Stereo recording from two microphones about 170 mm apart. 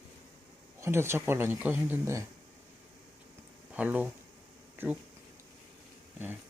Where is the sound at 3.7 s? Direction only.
10° right (ahead or behind).